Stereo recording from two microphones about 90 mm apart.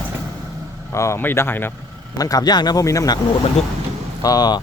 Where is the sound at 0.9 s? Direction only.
30° left (ahead or behind).